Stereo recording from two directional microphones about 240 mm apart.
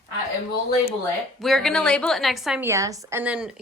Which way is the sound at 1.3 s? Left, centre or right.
Centre.